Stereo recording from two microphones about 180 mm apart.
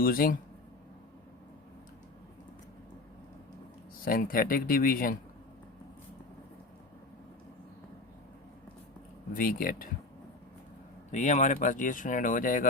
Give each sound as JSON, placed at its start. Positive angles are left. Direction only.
{"t": 0.0, "sound": "speech", "side_deg": 55}
{"t": 4.0, "sound": "speech", "side_deg": 50}
{"t": 9.3, "sound": "speech", "side_deg": 50}
{"t": 11.1, "sound": "speech", "side_deg": 40}